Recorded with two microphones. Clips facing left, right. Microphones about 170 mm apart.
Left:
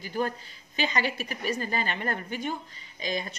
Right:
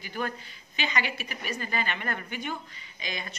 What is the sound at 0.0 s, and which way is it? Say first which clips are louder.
A woman's voice: left 4 dB; 35° left (ahead or behind).